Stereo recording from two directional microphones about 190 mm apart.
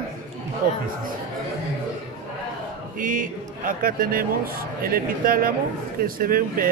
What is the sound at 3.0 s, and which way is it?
A man's voice, 45° right (ahead or behind).